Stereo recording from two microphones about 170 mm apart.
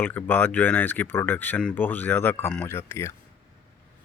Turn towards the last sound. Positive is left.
turn(degrees=15)  # may be behind; listen again after turning